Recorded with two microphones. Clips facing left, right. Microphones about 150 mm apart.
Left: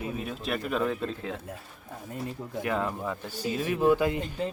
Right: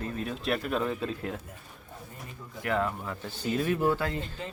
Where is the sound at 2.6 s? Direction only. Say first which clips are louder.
Right 1 dB; 20° left (ahead or behind).